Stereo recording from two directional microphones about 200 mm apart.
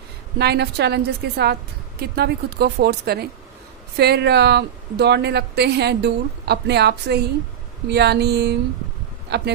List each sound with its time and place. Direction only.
0.4 s a woman's voice: 55° right (ahead or behind)